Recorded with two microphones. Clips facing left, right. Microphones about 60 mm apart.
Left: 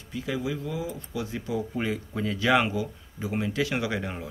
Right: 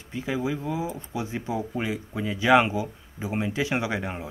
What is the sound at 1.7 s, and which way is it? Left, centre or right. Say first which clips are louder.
Speech: even; centre.